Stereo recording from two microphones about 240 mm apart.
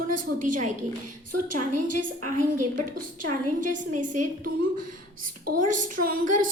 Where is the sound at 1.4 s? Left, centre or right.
Right.